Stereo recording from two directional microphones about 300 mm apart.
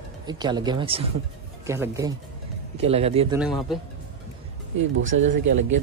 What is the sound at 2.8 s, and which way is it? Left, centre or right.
Speech, centre.